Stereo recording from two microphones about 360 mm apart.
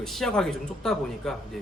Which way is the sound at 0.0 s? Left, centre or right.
Centre.